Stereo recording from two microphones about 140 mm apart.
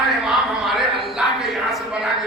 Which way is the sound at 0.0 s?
Centre (ahead or behind).